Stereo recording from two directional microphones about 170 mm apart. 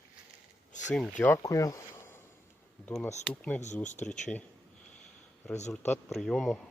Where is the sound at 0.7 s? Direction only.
45° left (ahead or behind).